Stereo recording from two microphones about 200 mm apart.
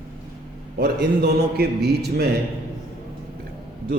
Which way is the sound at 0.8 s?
55° right (ahead or behind).